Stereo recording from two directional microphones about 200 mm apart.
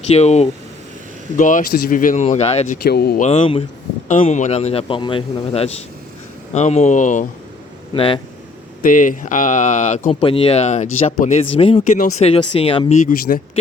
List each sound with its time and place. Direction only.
0.1 s speech: 35° left (ahead or behind)
2.8 s speech: 50° left (ahead or behind)
3.2 s speech: 30° left (ahead or behind)
7.9 s speech: 25° left (ahead or behind)
8.8 s speech: 40° left (ahead or behind)
13.0 s speech: 40° left (ahead or behind)